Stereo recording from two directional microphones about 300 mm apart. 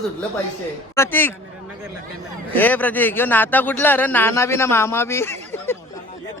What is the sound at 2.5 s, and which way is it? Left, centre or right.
Speech, centre.